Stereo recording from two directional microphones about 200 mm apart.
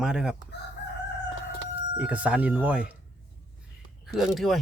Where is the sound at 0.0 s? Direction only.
5° right (ahead or behind).